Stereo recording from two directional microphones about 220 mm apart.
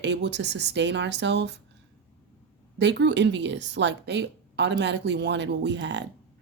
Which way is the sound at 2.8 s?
55° right (ahead or behind).